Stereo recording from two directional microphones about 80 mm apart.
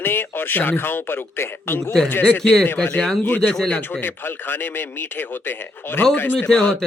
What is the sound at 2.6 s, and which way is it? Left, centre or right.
A man's voice, left.